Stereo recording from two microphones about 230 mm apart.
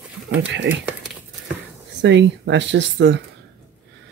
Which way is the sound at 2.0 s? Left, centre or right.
Right.